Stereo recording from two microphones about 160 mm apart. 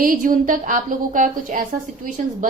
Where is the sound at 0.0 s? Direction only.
60° right (ahead or behind).